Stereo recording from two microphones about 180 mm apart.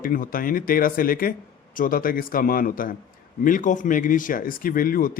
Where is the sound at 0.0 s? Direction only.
50° left (ahead or behind).